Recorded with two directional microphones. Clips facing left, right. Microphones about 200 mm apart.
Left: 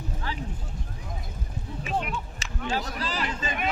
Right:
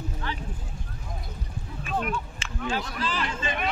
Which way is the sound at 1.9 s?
20° left (ahead or behind).